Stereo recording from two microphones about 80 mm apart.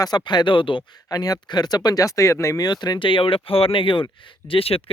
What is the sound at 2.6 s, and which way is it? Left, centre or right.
Speech, left.